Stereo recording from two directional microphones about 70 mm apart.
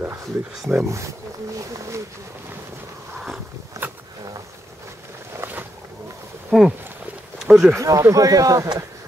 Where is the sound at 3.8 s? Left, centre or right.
Right.